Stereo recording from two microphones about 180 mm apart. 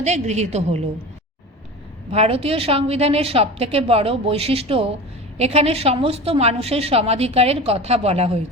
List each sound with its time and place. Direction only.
0.0 s a woman's voice: 40° right (ahead or behind)
2.0 s a woman's voice: 35° right (ahead or behind)